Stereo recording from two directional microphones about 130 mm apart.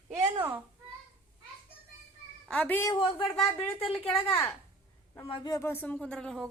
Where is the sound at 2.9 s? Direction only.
40° left (ahead or behind).